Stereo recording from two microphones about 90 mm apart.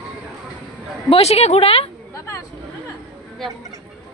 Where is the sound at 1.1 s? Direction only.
90° left.